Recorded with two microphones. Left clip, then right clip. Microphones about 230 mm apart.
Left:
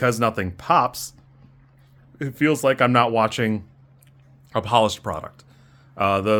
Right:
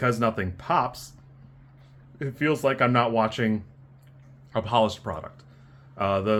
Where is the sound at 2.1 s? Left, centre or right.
Left.